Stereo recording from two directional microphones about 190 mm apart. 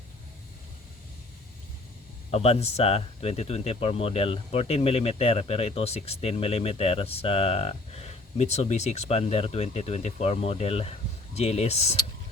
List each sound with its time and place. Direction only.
2.3 s speech: 35° left (ahead or behind)